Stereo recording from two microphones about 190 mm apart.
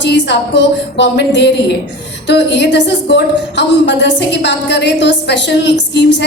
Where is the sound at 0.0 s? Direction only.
65° left (ahead or behind).